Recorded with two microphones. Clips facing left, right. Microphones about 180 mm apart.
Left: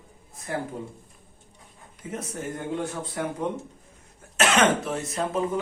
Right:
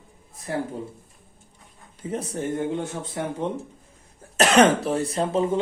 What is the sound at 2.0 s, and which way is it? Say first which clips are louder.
Speech: right 5 dB; 30° right (ahead or behind).